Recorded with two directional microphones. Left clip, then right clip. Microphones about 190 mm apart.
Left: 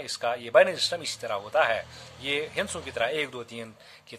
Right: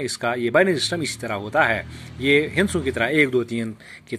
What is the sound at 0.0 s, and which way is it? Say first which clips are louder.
Speech: right 6 dB; 20° right (ahead or behind).